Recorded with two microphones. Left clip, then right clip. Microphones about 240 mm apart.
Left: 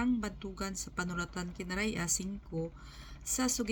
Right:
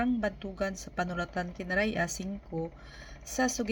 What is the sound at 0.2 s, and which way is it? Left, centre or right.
Speech, centre.